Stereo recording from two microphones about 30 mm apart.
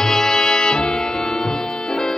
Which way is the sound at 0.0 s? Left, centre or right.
Centre.